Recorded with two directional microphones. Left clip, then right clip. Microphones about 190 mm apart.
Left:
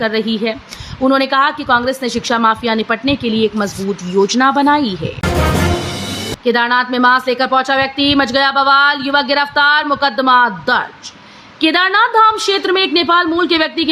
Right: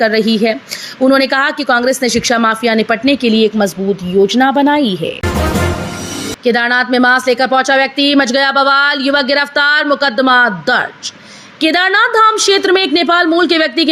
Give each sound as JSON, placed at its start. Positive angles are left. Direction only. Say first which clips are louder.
{"t": 0.0, "sound": "a woman's voice", "louder": "right 5 dB", "side_deg": -10}
{"t": 4.3, "sound": "speech", "louder": "right 1 dB", "side_deg": 5}
{"t": 6.4, "sound": "a woman's voice", "louder": "right 1 dB", "side_deg": -10}